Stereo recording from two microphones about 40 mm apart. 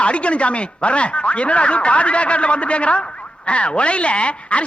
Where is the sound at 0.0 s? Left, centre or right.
Left.